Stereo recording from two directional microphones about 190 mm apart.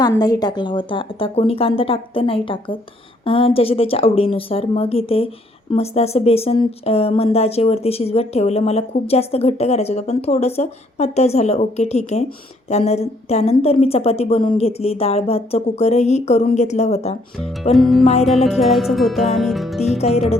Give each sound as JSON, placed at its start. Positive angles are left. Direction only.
{"t": 0.0, "sound": "speech", "side_deg": 20}
{"t": 17.4, "sound": "music", "side_deg": 0}
{"t": 18.0, "sound": "speech", "side_deg": 35}
{"t": 18.3, "sound": "music", "side_deg": 0}
{"t": 20.0, "sound": "speech", "side_deg": 35}